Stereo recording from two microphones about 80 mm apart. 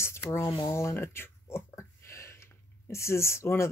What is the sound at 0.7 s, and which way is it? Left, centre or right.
Speech, left.